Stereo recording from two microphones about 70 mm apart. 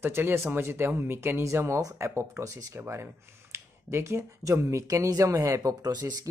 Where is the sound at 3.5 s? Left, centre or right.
Right.